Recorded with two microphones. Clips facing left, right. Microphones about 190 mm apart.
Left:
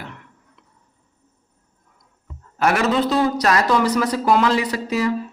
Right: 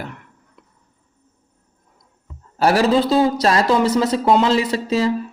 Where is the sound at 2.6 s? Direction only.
30° right (ahead or behind).